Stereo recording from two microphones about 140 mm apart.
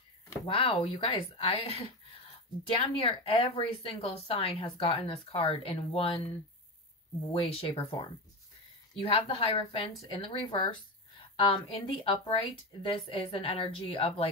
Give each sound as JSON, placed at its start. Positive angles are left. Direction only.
{"t": 0.5, "sound": "speech", "side_deg": 40}
{"t": 7.3, "sound": "speech", "side_deg": 40}
{"t": 9.0, "sound": "speech", "side_deg": 40}